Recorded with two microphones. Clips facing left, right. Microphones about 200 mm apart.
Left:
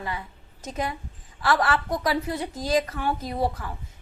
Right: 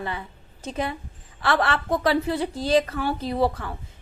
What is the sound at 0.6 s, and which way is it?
A woman's voice, 30° right (ahead or behind).